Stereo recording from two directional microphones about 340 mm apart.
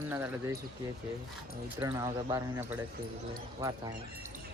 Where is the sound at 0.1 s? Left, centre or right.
Centre.